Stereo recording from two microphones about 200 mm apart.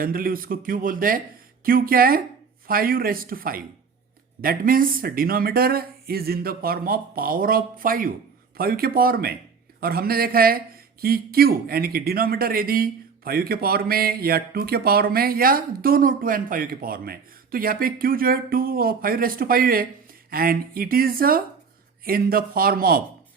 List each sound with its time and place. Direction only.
0.0 s a man's voice: 45° right (ahead or behind)